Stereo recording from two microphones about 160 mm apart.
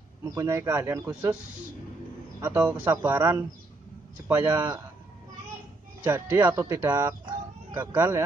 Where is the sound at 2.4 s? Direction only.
10° right (ahead or behind).